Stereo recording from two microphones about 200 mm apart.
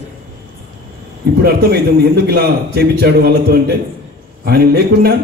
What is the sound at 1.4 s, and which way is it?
A man's voice, 50° right (ahead or behind).